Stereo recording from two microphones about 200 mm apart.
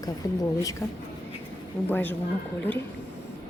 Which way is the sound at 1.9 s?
10° left (ahead or behind).